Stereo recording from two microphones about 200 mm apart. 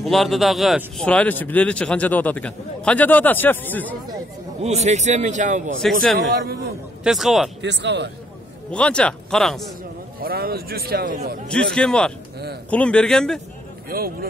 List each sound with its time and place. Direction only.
0.0 s speech: centre (ahead or behind)
4.8 s speech: 35° right (ahead or behind)
6.1 s a man's voice: 50° right (ahead or behind)
7.0 s speech: centre (ahead or behind)
7.6 s speech: 60° right (ahead or behind)
8.7 s speech: 5° left (ahead or behind)
10.2 s a man's voice: 50° right (ahead or behind)
11.4 s speech: 5° left (ahead or behind)
13.8 s speech: 50° right (ahead or behind)